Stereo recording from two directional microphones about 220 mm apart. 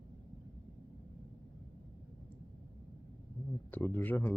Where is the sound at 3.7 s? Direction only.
10° left (ahead or behind).